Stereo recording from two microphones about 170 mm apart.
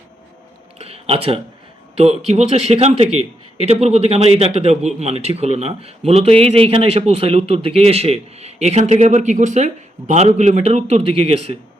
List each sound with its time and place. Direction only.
0.8 s a man's voice: 35° right (ahead or behind)